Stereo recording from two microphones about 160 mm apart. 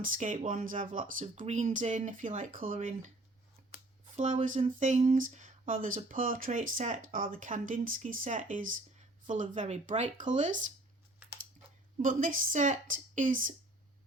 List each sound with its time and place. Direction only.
0.0 s speech: 55° right (ahead or behind)
4.2 s speech: 50° right (ahead or behind)
11.2 s typing: 15° right (ahead or behind)
12.0 s speech: 55° right (ahead or behind)